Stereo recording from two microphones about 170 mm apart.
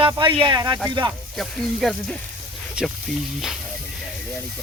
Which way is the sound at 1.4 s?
5° left (ahead or behind).